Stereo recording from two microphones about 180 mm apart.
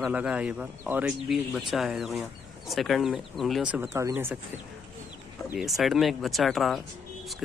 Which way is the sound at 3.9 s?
15° right (ahead or behind).